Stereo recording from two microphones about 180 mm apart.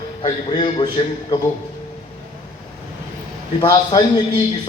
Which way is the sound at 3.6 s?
25° left (ahead or behind).